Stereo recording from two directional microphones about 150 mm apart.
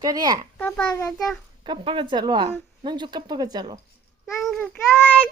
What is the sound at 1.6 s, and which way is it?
A woman's voice, 35° right (ahead or behind).